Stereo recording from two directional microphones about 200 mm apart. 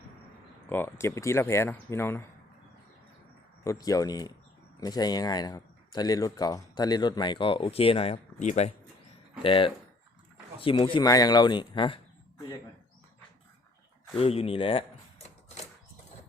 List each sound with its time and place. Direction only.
0.7 s speech: 10° left (ahead or behind)
3.6 s speech: 15° left (ahead or behind)
14.2 s a sound: 30° left (ahead or behind)